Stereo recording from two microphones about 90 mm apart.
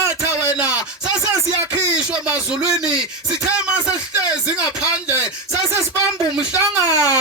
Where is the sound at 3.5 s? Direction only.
10° right (ahead or behind).